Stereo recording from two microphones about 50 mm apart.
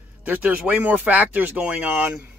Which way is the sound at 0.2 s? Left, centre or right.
Right.